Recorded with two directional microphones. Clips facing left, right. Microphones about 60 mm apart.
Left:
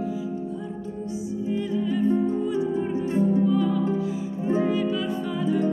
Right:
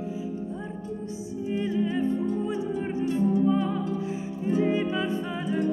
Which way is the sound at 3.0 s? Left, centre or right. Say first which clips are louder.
Left 1 dB; left.